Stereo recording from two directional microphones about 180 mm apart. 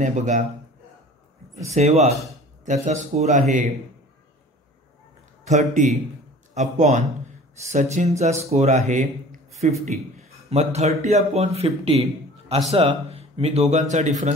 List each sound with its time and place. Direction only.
0.0 s a man's voice: 45° right (ahead or behind)
1.7 s a man's voice: 40° right (ahead or behind)
5.4 s a man's voice: 40° right (ahead or behind)